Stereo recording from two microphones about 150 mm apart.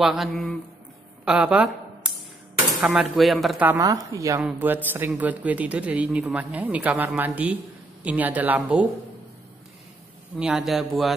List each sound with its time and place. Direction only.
0.0 s speech: centre (ahead or behind)
1.2 s a sound: 5° right (ahead or behind)
2.8 s speech: 5° right (ahead or behind)
3.8 s a woman's voice: 25° right (ahead or behind)
4.4 s speech: 10° right (ahead or behind)
10.4 s speech: 5° right (ahead or behind)